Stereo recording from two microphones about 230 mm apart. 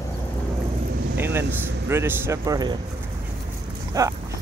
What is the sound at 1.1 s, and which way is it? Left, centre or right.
Speech, centre.